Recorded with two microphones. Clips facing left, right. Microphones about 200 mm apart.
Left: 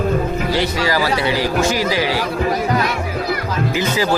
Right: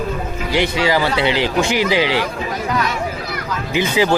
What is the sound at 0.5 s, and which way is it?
Speech, 20° right (ahead or behind).